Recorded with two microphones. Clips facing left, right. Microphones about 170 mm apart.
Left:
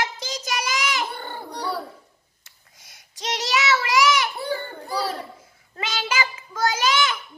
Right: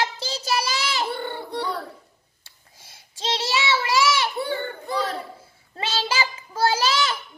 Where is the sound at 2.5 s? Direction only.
30° right (ahead or behind).